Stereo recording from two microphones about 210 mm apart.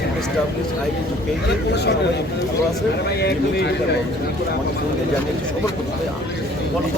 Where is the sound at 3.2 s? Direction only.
50° left (ahead or behind).